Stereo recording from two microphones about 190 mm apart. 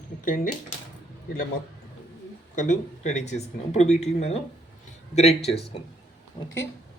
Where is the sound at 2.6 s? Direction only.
40° left (ahead or behind).